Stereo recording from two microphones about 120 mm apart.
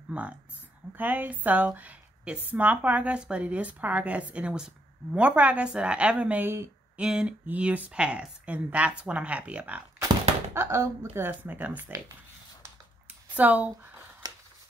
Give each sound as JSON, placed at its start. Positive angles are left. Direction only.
{"t": 0.1, "sound": "a woman's voice", "side_deg": -10}
{"t": 7.0, "sound": "a woman's voice", "side_deg": -5}
{"t": 10.5, "sound": "a woman's voice", "side_deg": -20}
{"t": 13.4, "sound": "a woman's voice", "side_deg": -15}